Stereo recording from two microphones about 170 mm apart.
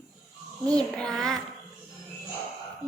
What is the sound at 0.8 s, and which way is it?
Speech, 5° left (ahead or behind).